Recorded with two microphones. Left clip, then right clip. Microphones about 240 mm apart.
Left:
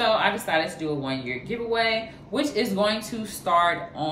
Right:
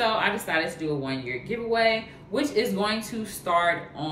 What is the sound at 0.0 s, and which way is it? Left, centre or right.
Speech, centre.